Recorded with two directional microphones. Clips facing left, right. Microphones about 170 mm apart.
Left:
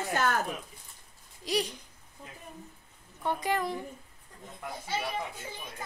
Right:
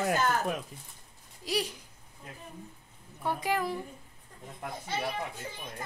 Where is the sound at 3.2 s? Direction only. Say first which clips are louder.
Even; 5° right (ahead or behind).